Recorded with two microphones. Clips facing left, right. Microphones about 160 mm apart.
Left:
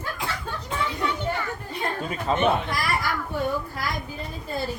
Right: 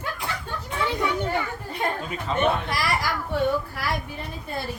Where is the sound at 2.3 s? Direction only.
40° left (ahead or behind).